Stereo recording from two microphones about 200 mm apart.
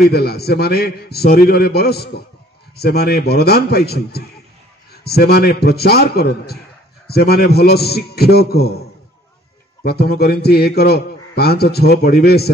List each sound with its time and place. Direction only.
0.1 s a man's voice: 50° left (ahead or behind)
9.8 s a man's voice: 50° left (ahead or behind)